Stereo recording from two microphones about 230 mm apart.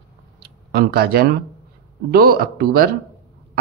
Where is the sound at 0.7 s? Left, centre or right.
Right.